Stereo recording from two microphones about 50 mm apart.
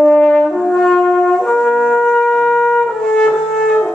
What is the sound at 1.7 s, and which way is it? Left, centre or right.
Shofar, centre.